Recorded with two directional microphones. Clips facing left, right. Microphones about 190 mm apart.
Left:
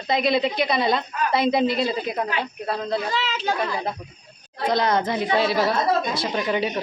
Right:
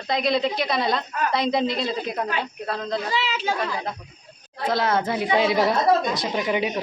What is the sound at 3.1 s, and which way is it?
Speech, 10° right (ahead or behind).